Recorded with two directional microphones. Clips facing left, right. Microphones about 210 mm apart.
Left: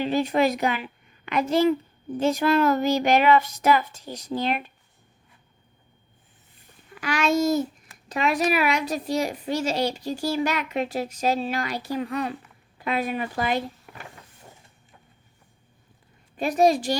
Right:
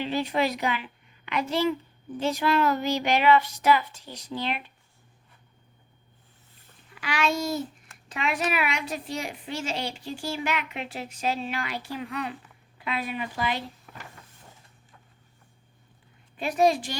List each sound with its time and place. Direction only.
0.0 s a woman's voice: 45° left (ahead or behind)
6.9 s a woman's voice: 45° left (ahead or behind)
16.4 s a woman's voice: 40° left (ahead or behind)